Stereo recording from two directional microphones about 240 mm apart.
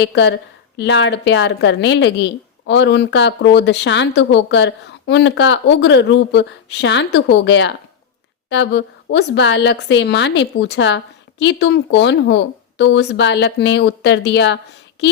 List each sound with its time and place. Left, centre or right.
0.0 s a woman's voice: left